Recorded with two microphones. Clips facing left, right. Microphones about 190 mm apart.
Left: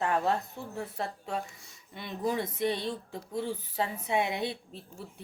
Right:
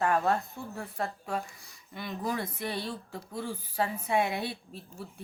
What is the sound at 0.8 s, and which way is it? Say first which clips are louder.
Speech: even; 25° left (ahead or behind).